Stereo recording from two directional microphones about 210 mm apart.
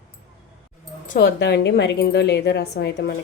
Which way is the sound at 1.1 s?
50° left (ahead or behind).